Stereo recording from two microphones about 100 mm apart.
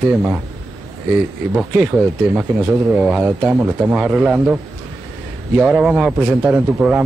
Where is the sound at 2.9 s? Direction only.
10° right (ahead or behind).